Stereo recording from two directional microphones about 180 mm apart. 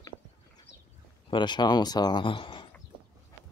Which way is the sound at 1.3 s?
25° left (ahead or behind).